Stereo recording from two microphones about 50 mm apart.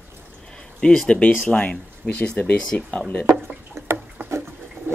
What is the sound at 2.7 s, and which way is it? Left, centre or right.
Speech, left.